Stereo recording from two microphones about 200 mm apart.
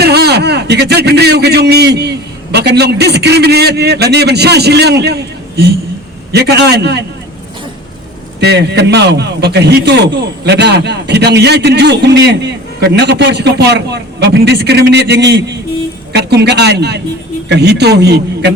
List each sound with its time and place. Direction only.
0.0 s a man's voice: 55° right (ahead or behind)
8.4 s a man's voice: 55° right (ahead or behind)